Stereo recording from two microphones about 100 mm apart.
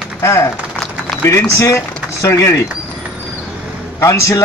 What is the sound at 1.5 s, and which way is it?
Speech, 30° left (ahead or behind).